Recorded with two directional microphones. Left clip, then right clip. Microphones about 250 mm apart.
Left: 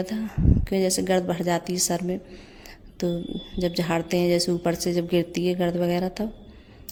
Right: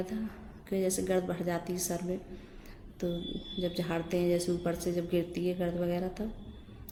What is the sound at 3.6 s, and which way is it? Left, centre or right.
A woman's voice, left.